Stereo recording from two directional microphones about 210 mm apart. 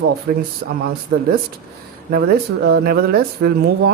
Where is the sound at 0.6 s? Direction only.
45° right (ahead or behind).